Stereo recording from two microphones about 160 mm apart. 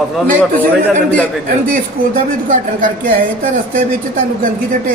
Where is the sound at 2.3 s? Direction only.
55° right (ahead or behind).